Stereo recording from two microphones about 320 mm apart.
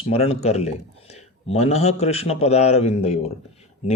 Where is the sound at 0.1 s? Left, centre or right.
Centre.